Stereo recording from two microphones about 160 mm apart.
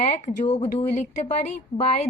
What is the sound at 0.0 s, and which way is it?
A woman's voice, 45° left (ahead or behind).